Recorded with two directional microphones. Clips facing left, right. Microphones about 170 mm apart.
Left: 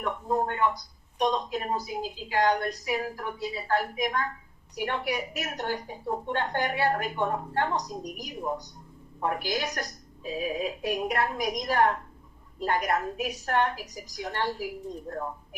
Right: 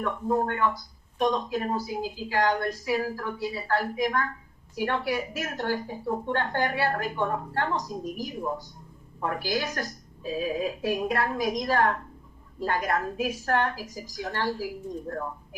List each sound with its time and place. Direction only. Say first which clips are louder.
0.0 s a woman's voice: right 2 dB; 20° left (ahead or behind)